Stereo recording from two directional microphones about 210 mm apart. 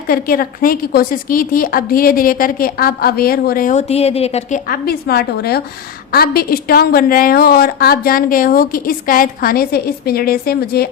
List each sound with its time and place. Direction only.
0.1 s a woman's voice: 45° left (ahead or behind)
4.7 s a woman's voice: 50° left (ahead or behind)